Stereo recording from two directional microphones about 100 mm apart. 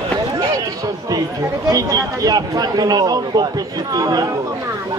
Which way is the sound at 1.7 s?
35° right (ahead or behind).